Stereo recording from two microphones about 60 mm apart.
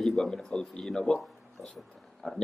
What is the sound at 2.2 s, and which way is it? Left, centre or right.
Speech, centre.